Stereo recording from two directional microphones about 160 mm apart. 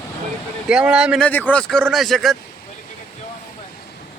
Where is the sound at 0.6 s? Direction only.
5° right (ahead or behind).